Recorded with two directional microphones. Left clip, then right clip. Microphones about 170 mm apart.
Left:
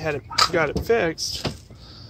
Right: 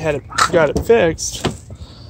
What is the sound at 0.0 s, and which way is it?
Speech, 20° right (ahead or behind).